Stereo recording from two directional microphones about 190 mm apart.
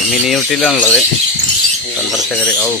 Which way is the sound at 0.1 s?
Centre (ahead or behind).